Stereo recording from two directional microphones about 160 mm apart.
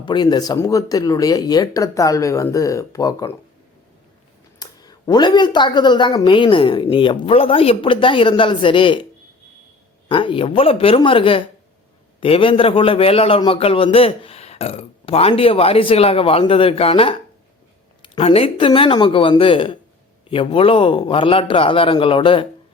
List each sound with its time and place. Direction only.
0.0 s speech: 25° left (ahead or behind)
4.6 s a woman's voice: 25° left (ahead or behind)
10.1 s a man's voice: 30° left (ahead or behind)